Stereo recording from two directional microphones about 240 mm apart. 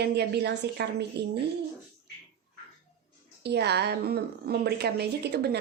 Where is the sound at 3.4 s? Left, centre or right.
Right.